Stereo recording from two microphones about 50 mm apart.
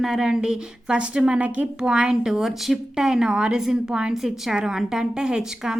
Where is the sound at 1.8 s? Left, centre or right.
Centre.